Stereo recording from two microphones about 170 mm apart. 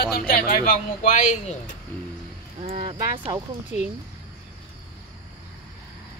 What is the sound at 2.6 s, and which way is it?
Speech, 35° right (ahead or behind).